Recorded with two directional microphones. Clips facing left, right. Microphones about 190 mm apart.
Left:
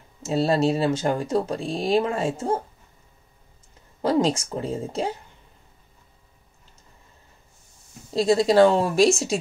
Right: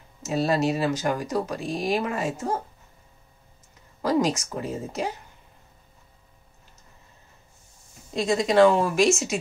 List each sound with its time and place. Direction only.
0.2 s speech: 30° left (ahead or behind)
4.0 s speech: 30° left (ahead or behind)
8.1 s speech: 30° left (ahead or behind)